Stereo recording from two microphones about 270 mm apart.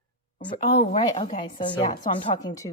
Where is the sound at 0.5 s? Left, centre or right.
Left.